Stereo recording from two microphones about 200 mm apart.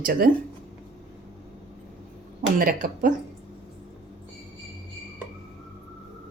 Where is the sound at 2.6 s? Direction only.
45° right (ahead or behind).